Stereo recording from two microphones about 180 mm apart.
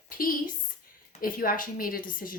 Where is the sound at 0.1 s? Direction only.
50° left (ahead or behind).